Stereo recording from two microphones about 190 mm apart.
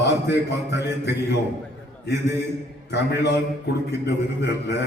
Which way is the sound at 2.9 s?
60° left (ahead or behind).